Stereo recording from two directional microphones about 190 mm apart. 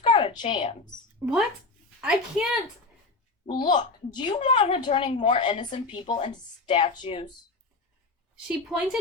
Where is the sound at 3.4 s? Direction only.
25° left (ahead or behind).